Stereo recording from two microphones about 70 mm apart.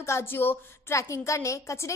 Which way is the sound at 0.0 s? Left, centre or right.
Left.